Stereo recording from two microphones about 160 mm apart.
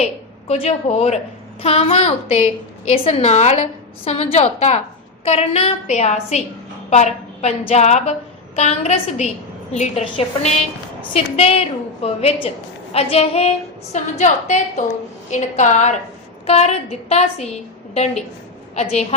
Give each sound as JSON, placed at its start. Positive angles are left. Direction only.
{"t": 0.0, "sound": "a woman's voice", "side_deg": 40}